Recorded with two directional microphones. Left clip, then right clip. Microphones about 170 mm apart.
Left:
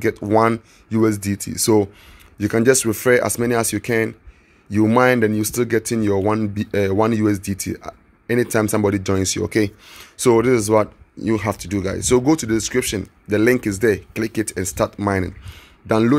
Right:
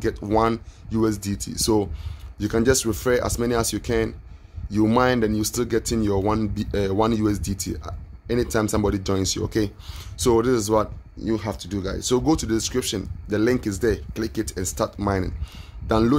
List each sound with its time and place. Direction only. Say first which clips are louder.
0.0 s speech: left 5 dB; 20° left (ahead or behind)
11.2 s speech: left 5 dB; 30° left (ahead or behind)